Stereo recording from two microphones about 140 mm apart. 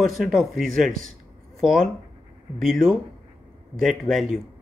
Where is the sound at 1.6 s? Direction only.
Centre (ahead or behind).